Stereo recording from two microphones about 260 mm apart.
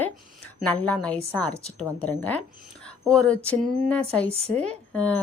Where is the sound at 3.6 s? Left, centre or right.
Right.